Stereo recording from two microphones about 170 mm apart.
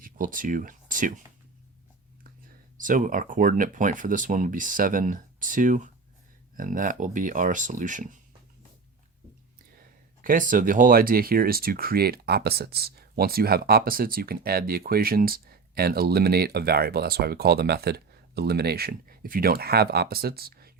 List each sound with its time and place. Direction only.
0.0 s speech: 55° right (ahead or behind)
2.7 s speech: 50° right (ahead or behind)
10.2 s speech: 55° right (ahead or behind)